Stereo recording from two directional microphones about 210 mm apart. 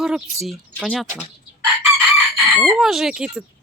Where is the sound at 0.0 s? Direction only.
Centre (ahead or behind).